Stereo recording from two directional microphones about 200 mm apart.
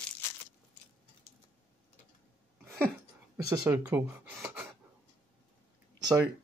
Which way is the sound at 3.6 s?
10° right (ahead or behind).